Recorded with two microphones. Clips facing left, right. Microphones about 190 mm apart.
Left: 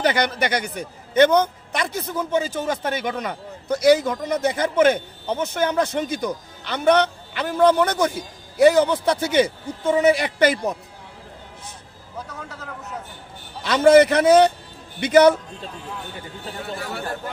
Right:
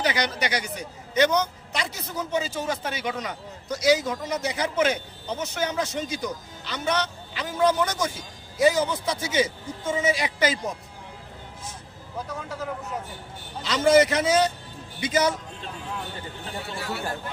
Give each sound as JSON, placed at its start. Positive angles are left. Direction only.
{"t": 0.0, "sound": "a man's voice", "side_deg": 55}
{"t": 13.6, "sound": "a man's voice", "side_deg": 60}